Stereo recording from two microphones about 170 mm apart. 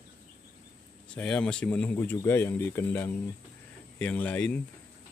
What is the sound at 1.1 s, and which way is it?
Speech, 5° left (ahead or behind).